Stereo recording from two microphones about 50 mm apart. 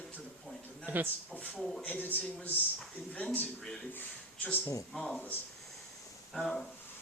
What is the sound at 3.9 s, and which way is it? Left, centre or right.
Speech, left.